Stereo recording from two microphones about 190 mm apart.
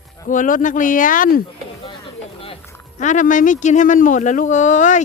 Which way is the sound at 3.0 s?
40° left (ahead or behind).